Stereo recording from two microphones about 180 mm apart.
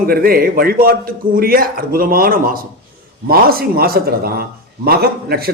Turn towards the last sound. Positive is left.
turn(degrees=-60)  # may be behind; listen again after turning